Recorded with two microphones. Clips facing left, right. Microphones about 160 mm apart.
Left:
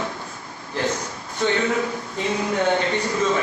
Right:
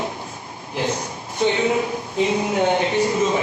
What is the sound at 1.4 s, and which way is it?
Speech, 20° right (ahead or behind).